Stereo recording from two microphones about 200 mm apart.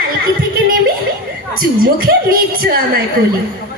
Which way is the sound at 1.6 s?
45° right (ahead or behind).